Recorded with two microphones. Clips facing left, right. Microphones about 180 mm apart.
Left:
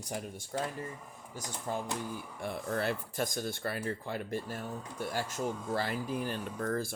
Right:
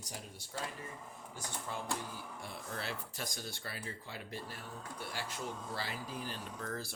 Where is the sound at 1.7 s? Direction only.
45° left (ahead or behind).